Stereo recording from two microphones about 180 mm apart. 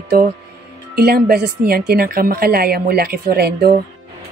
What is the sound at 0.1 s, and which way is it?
A woman's voice, 55° right (ahead or behind).